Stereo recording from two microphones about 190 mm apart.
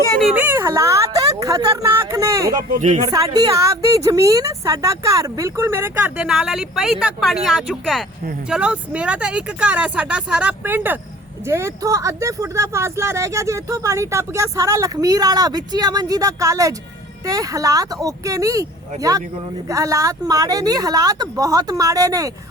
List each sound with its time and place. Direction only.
0.3 s speech: 10° right (ahead or behind)
2.7 s speech: 40° right (ahead or behind)
3.1 s speech: 20° right (ahead or behind)